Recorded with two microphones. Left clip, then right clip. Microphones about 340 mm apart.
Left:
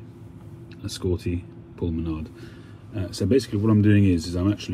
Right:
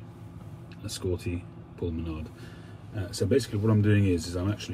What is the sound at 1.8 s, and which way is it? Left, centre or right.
Speech, left.